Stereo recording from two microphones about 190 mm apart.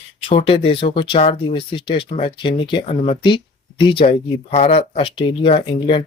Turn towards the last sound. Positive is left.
turn(degrees=30)  # may be behind; listen again after turning